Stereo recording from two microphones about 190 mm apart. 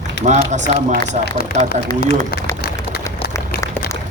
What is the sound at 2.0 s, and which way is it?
Speech, 60° left (ahead or behind).